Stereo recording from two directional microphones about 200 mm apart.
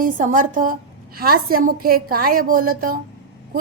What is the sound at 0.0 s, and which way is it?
A woman's voice, 40° right (ahead or behind).